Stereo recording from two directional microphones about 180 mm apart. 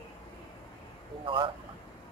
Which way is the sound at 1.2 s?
25° right (ahead or behind).